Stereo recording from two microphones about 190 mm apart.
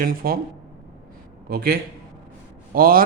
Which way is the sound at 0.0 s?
50° right (ahead or behind).